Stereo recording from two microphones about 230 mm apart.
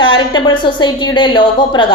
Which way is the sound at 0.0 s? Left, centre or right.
Left.